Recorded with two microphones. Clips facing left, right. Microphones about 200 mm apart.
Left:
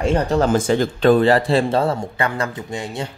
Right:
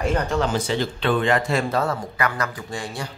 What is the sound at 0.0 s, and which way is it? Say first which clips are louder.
Speech: left 5 dB; 30° left (ahead or behind).